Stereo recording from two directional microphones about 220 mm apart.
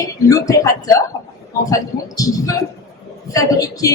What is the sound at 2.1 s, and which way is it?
A woman's voice, 15° left (ahead or behind).